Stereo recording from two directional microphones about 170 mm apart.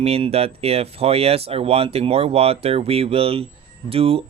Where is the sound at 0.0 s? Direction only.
35° right (ahead or behind).